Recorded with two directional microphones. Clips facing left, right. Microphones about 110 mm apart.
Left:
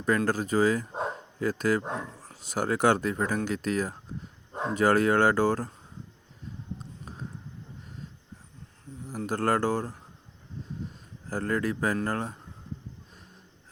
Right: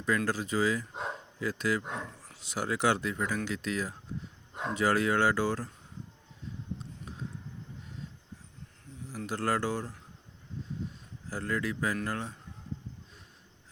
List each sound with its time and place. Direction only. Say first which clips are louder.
0.3 s speech: left 5 dB; 45° left (ahead or behind)
6.7 s a sound: left 1 dB; 40° left (ahead or behind)
9.0 s speech: left 5 dB; 45° left (ahead or behind)
11.3 s speech: left 5 dB; 50° left (ahead or behind)